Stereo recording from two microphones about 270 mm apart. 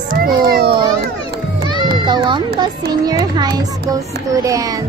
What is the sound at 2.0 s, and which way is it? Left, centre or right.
Baby cry, centre.